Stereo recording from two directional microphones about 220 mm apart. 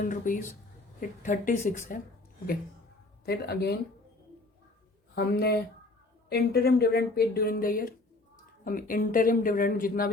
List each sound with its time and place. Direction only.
0.0 s speech: 35° left (ahead or behind)
3.2 s speech: 45° left (ahead or behind)
5.1 s speech: 50° left (ahead or behind)